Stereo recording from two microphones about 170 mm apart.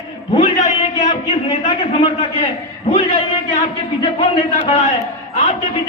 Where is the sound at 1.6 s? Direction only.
40° left (ahead or behind).